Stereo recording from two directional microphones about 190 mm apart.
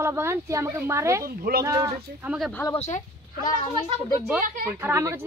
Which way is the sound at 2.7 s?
35° left (ahead or behind).